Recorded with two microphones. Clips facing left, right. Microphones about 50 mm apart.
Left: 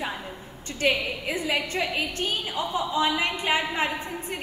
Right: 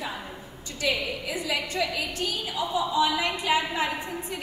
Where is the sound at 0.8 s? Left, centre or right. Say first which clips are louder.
Left 3 dB; left.